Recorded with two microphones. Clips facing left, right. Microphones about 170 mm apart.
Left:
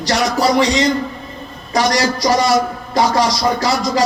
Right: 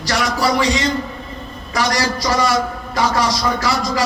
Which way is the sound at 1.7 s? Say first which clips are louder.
Left 3 dB; 35° left (ahead or behind).